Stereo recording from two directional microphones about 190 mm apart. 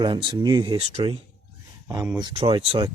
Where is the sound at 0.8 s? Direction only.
35° right (ahead or behind).